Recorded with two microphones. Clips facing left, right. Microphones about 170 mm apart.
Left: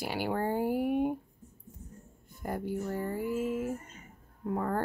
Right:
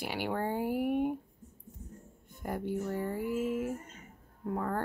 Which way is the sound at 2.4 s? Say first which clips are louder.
Even; 5° left (ahead or behind).